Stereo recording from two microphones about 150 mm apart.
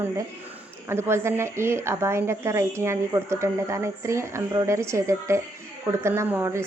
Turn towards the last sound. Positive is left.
turn(degrees=-15)  # may be behind; listen again after turning